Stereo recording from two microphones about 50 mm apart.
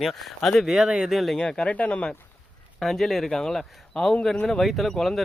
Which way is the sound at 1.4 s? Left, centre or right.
Centre.